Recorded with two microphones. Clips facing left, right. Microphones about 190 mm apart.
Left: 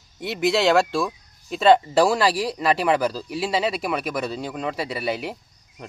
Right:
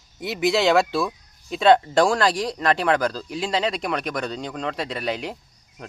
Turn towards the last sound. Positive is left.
turn(degrees=5)  # may be behind; listen again after turning